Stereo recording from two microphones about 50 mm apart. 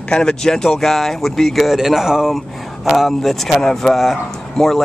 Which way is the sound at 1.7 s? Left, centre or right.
Centre.